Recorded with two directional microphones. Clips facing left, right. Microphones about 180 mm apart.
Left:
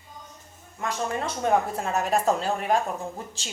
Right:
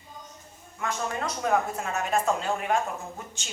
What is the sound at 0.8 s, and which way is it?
Speech, 30° left (ahead or behind).